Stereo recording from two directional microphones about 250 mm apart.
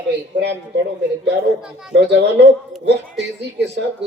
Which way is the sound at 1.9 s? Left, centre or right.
Right.